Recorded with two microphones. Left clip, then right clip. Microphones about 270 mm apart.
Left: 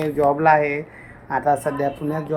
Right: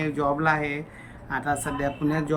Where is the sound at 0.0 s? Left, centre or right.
Centre.